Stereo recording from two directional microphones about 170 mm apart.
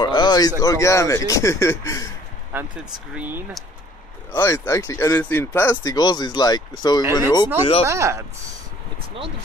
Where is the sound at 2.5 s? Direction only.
10° right (ahead or behind).